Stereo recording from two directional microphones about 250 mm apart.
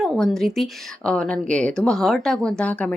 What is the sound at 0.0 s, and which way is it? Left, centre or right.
A woman's voice, centre.